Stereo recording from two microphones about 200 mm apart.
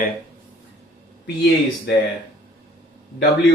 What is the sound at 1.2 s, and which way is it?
Speech, 55° left (ahead or behind).